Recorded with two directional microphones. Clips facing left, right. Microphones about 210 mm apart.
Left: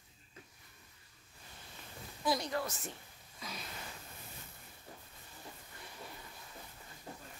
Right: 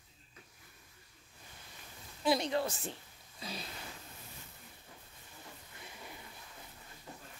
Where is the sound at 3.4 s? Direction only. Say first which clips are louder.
Right 3 dB; 30° right (ahead or behind).